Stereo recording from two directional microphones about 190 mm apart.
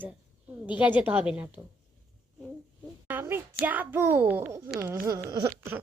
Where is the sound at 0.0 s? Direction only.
5° right (ahead or behind).